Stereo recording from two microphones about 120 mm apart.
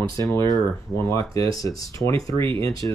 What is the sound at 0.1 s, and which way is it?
Speech, 25° left (ahead or behind).